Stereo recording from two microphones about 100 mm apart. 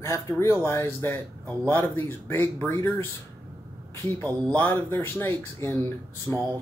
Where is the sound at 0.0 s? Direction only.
30° left (ahead or behind).